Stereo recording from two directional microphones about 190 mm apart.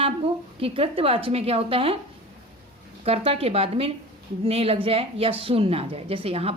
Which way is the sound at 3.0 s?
30° right (ahead or behind).